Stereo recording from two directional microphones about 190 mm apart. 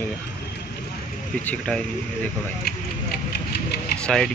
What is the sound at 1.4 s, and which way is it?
Speech, 10° left (ahead or behind).